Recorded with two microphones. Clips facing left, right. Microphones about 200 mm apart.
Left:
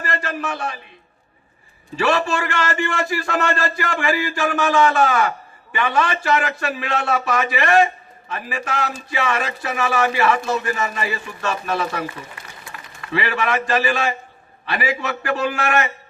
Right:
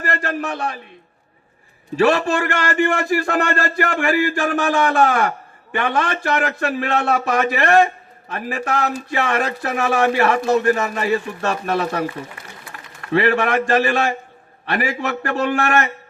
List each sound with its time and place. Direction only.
0.0 s a sound: 55° right (ahead or behind)
2.0 s a man's voice: 50° right (ahead or behind)
11.4 s a man's voice: 40° right (ahead or behind); by 15.5 s 55° right (ahead or behind)